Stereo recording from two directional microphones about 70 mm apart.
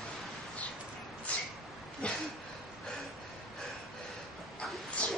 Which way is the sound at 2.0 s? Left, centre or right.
Centre.